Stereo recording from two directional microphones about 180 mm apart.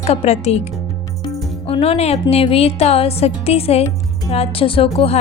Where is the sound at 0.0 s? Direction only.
35° left (ahead or behind).